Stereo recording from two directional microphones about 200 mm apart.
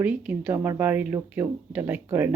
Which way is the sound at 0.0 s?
10° right (ahead or behind).